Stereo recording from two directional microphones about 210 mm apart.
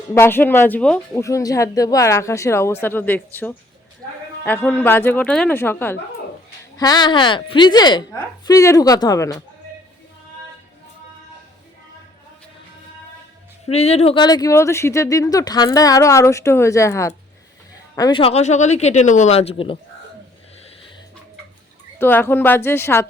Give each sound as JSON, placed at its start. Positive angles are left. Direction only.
{"t": 0.1, "sound": "a woman's voice", "side_deg": 10}
{"t": 13.7, "sound": "speech", "side_deg": 30}
{"t": 21.9, "sound": "speech", "side_deg": 10}